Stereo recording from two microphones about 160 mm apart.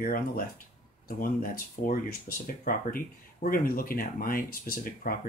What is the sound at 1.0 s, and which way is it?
Speech, 65° left (ahead or behind).